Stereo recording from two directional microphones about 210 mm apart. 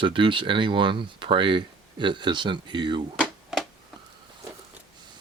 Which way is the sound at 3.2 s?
Centre (ahead or behind).